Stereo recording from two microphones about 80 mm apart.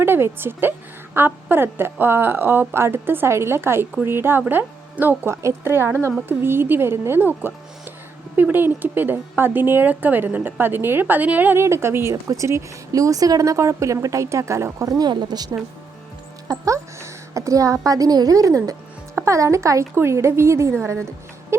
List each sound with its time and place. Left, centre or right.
0.0 s a woman's voice: right
5.3 s a woman's voice: right
11.6 s speech: right
15.1 s a woman's voice: right
16.5 s a woman's voice: right